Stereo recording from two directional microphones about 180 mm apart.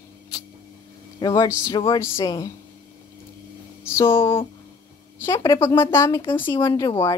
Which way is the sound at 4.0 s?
15° left (ahead or behind).